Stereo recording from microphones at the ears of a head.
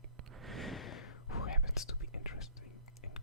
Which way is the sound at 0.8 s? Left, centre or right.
Left.